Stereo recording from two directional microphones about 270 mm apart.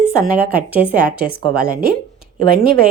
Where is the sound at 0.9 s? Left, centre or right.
Right.